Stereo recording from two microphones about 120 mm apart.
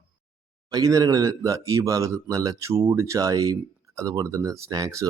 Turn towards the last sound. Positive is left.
turn(degrees=-30)  # may be behind; listen again after turning